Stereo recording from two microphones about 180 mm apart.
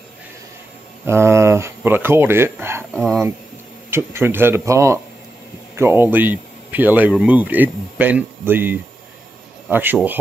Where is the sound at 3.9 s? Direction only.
15° right (ahead or behind).